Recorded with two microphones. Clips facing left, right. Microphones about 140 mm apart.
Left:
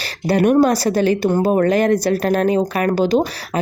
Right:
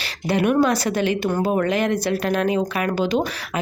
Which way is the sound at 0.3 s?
40° left (ahead or behind).